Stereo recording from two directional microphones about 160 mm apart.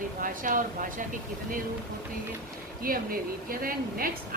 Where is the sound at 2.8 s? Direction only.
65° right (ahead or behind).